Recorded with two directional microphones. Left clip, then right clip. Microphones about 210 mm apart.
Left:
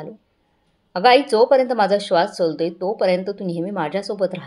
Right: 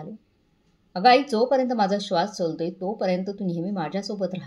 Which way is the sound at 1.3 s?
5° left (ahead or behind).